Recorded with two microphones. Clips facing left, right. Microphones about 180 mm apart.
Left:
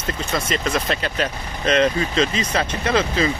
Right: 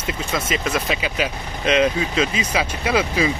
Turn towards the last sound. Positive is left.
turn(degrees=-10)  # may be behind; listen again after turning